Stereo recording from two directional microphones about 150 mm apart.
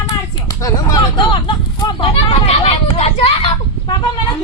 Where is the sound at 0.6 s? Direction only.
25° left (ahead or behind).